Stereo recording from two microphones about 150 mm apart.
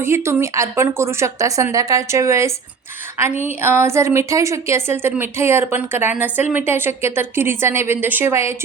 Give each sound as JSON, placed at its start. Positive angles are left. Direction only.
{"t": 0.0, "sound": "a woman's voice", "side_deg": -20}